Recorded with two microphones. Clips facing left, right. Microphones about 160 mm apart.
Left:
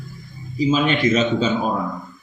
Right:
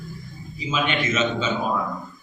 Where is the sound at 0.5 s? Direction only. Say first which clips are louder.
Left 7 dB; 35° left (ahead or behind).